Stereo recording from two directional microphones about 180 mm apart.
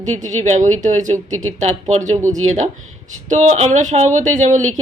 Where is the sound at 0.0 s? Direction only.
40° right (ahead or behind).